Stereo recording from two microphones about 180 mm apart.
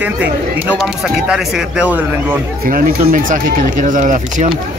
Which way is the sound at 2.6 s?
50° right (ahead or behind).